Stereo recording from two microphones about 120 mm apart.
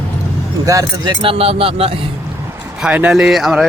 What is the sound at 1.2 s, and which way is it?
Speech, 50° right (ahead or behind).